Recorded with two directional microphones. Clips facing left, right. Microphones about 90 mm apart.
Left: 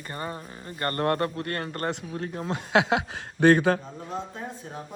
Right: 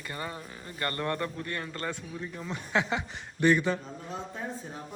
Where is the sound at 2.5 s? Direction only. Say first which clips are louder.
Left 6 dB; 90° left.